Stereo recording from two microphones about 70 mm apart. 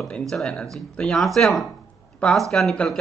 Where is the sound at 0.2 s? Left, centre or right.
Centre.